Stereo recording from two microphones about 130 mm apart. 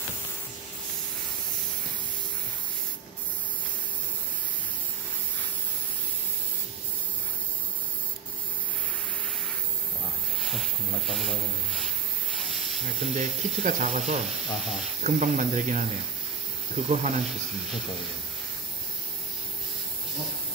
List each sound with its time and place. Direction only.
10.5 s hiss: centre (ahead or behind)
13.0 s speech: 60° right (ahead or behind)